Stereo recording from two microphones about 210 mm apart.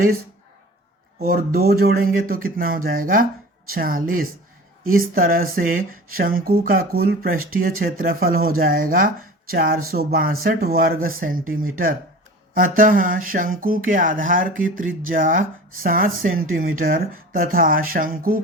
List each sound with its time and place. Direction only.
1.5 s speech: 50° right (ahead or behind)